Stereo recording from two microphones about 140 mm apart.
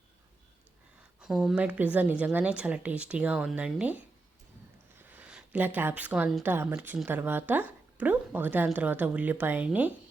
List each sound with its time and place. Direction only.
1.2 s speech: centre (ahead or behind)
4.9 s a sound: 10° right (ahead or behind)
6.4 s speech: 15° right (ahead or behind)